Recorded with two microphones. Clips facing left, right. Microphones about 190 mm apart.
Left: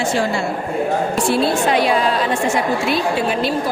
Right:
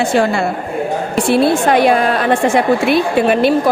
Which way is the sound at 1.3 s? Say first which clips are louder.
Right 6 dB; 60° right (ahead or behind).